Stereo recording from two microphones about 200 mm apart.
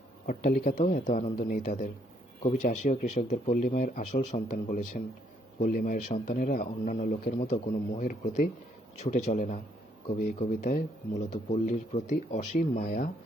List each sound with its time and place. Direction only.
0.3 s a man's voice: 45° left (ahead or behind)